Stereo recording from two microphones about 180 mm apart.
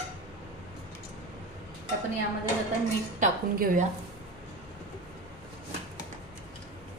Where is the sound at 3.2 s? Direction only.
45° right (ahead or behind).